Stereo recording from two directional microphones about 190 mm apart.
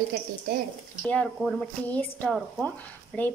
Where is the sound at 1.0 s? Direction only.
5° left (ahead or behind).